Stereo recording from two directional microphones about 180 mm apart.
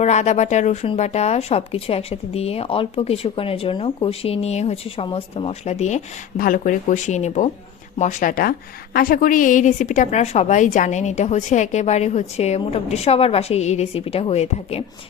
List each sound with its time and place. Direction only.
0.0 s speech: 40° left (ahead or behind)